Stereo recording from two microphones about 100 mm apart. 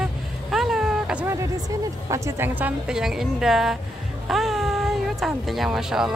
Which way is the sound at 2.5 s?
15° right (ahead or behind).